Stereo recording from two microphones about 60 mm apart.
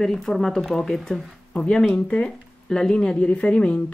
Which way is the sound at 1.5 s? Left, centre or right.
Centre.